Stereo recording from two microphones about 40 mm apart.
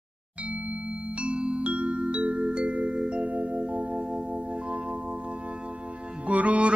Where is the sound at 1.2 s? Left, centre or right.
Right.